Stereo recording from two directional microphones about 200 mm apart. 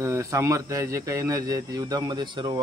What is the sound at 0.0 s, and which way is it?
Speech, 15° right (ahead or behind).